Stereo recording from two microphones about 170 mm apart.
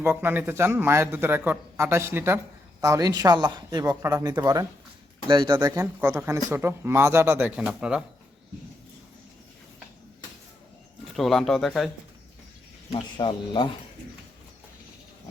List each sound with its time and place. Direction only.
0.0 s speech: 10° right (ahead or behind)
11.1 s speech: centre (ahead or behind)
12.9 s speech: 30° left (ahead or behind)